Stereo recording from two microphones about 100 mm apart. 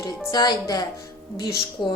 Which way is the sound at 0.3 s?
40° left (ahead or behind).